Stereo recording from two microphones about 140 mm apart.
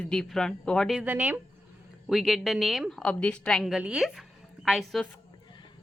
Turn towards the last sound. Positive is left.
turn(degrees=0)  # may be behind; listen again after turning